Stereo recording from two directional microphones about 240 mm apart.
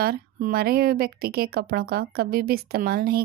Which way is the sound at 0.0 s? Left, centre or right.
Right.